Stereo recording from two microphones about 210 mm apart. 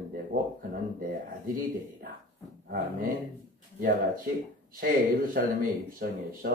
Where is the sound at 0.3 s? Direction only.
40° right (ahead or behind).